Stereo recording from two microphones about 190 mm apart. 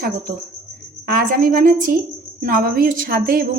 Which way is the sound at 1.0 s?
50° right (ahead or behind).